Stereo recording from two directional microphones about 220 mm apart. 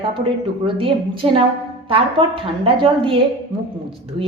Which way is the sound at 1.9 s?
25° right (ahead or behind).